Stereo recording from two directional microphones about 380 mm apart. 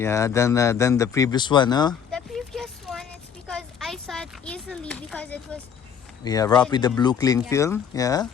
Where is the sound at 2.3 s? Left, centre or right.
Centre.